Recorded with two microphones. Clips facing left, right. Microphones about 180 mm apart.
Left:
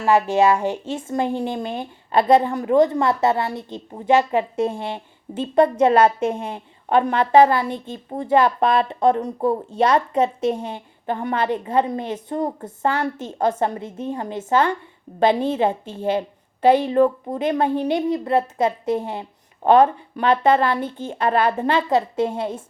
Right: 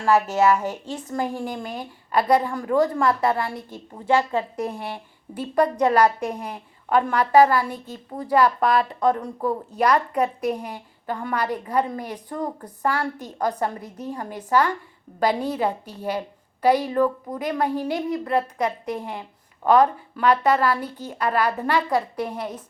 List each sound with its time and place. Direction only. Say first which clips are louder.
0.0 s a woman's voice: left 2 dB; 15° left (ahead or behind)